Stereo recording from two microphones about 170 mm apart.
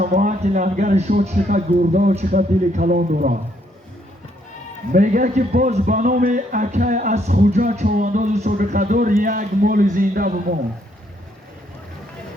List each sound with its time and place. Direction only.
0.0 s speech: 50° right (ahead or behind)
4.9 s speech: 50° right (ahead or behind)